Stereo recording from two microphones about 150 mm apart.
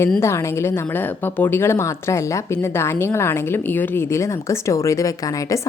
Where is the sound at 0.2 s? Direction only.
20° left (ahead or behind).